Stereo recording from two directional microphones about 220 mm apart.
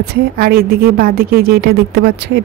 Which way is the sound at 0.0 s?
45° right (ahead or behind).